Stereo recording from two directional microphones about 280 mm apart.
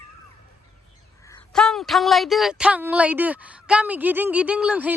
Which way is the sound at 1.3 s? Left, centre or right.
Centre.